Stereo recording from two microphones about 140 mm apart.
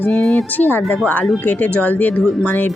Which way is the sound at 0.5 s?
15° left (ahead or behind).